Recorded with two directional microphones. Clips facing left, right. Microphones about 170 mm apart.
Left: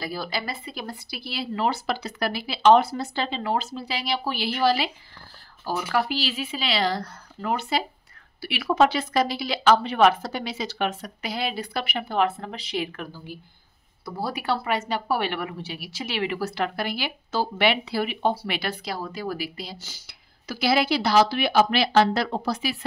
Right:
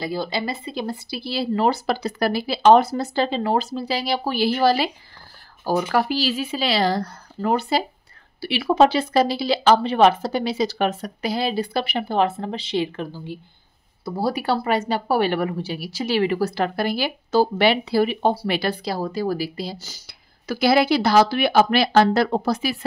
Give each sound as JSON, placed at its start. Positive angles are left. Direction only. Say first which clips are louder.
{"t": 0.0, "sound": "speech", "louder": "right 5 dB", "side_deg": -25}